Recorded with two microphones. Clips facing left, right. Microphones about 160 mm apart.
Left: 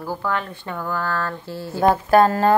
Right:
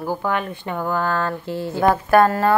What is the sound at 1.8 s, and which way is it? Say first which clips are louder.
Speech: even; 30° left (ahead or behind).